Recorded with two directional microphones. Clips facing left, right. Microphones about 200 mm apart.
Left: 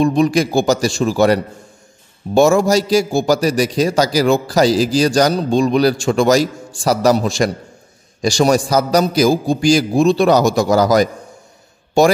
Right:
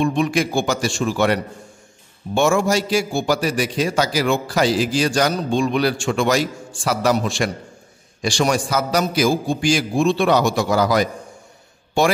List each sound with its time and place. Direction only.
0.0 s a man's voice: 40° left (ahead or behind)